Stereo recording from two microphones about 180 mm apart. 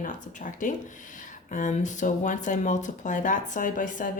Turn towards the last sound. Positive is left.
turn(degrees=45)  # may be behind; listen again after turning